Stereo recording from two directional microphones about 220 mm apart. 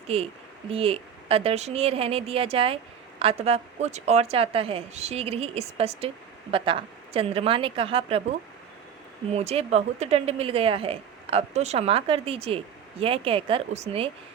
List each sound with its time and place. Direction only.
0.1 s a woman's voice: 25° right (ahead or behind)